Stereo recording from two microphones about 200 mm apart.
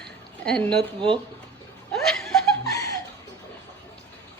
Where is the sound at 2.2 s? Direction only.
Centre (ahead or behind).